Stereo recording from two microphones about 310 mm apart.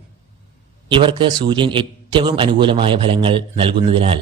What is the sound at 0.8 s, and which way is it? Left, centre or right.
Speech, centre.